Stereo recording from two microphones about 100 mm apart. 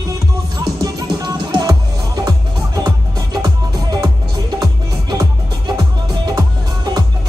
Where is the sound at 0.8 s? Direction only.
45° right (ahead or behind).